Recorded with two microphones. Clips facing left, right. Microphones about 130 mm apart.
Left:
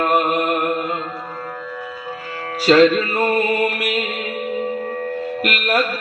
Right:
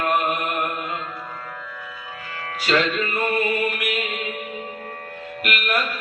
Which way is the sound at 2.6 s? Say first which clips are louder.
Left 9 dB; 35° left (ahead or behind).